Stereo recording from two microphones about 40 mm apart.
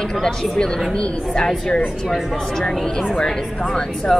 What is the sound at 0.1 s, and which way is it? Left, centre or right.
A woman's voice, centre.